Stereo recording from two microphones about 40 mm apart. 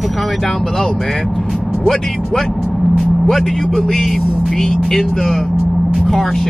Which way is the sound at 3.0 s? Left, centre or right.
Centre.